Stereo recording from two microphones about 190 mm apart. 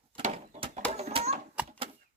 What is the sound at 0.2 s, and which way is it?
Bird, 40° right (ahead or behind).